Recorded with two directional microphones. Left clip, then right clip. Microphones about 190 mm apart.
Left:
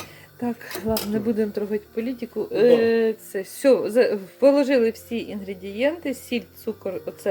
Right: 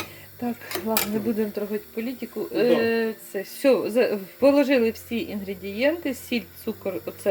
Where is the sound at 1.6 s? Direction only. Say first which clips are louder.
Left 3 dB; 15° left (ahead or behind).